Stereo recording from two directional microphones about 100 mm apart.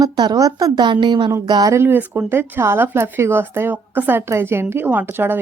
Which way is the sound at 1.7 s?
20° right (ahead or behind).